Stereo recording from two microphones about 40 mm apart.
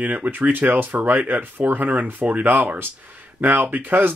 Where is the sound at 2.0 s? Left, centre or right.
Right.